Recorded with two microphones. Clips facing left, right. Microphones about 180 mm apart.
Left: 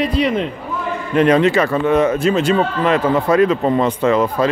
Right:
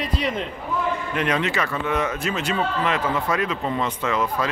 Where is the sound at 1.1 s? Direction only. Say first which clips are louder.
Left 15 dB; 35° left (ahead or behind).